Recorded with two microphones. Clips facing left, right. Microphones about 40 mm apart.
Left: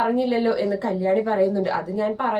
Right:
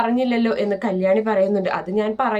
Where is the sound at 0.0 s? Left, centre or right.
Right.